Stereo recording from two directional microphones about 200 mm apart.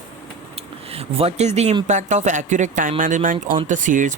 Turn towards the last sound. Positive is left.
turn(degrees=-40)  # may be behind; listen again after turning